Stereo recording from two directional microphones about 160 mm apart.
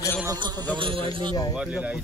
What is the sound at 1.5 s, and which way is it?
Speech, 5° right (ahead or behind).